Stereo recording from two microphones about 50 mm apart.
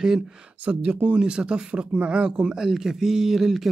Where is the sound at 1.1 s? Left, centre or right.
Centre.